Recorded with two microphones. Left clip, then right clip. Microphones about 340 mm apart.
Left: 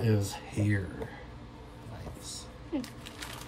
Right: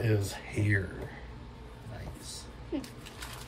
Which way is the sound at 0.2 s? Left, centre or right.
Centre.